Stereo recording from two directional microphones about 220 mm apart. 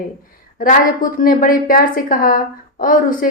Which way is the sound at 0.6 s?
40° left (ahead or behind).